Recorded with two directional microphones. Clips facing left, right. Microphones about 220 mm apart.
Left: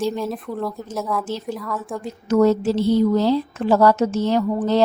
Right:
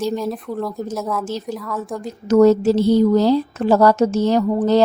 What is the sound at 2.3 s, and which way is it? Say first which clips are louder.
A woman's voice: right 4 dB; 40° right (ahead or behind).